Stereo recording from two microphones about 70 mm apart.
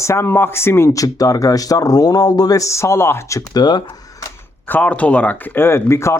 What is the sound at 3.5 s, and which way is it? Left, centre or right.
Speech, left.